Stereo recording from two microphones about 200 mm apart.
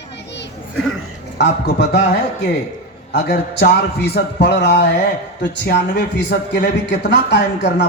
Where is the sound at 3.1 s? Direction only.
55° left (ahead or behind).